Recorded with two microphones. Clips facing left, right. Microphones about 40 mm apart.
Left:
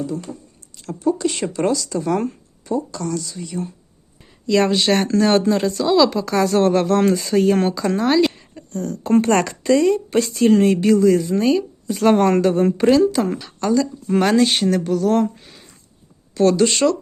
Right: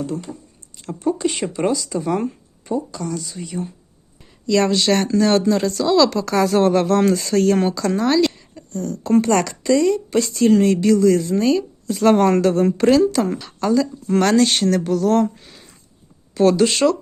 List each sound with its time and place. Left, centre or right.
0.8 s speech: right
1.3 s speech: centre
4.4 s speech: left
5.6 s speech: left
6.0 s speech: centre
12.0 s speech: centre
13.6 s speech: centre
14.1 s speech: centre